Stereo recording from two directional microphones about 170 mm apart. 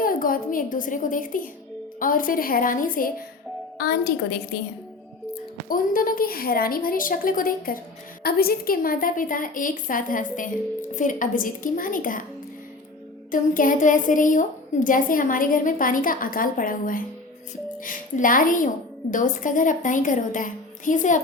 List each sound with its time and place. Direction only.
0.0 s a woman's voice: 55° left (ahead or behind)
5.6 s a woman's voice: 55° left (ahead or behind)
13.3 s a woman's voice: 50° left (ahead or behind)